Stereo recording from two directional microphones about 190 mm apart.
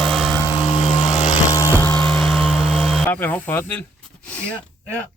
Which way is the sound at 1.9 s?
5° left (ahead or behind).